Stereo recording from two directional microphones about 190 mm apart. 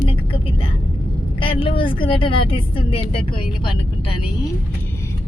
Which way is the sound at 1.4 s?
30° left (ahead or behind).